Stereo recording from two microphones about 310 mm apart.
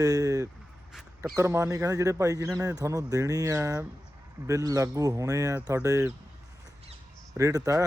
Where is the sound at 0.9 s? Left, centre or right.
Centre.